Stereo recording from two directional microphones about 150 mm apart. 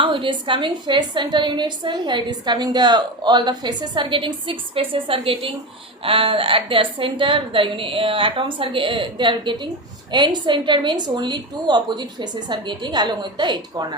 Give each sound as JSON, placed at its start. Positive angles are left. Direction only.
{"t": 0.0, "sound": "a woman's voice", "side_deg": -35}